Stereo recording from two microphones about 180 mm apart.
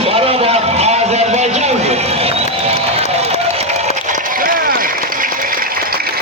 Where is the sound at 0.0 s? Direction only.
35° right (ahead or behind).